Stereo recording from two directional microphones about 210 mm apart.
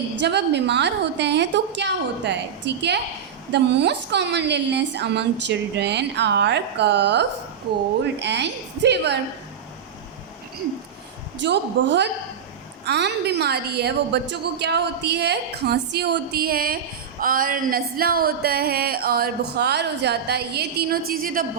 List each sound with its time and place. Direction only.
0.2 s a woman's voice: 55° right (ahead or behind)
11.3 s a woman's voice: 55° right (ahead or behind)